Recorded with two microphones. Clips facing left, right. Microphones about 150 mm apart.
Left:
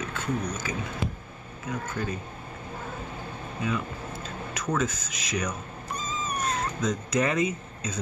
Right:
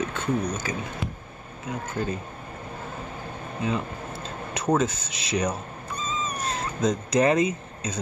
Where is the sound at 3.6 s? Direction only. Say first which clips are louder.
Right 2 dB; 25° right (ahead or behind).